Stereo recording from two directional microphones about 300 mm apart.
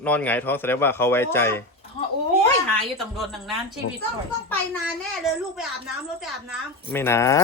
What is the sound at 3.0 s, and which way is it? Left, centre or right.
Speech, centre.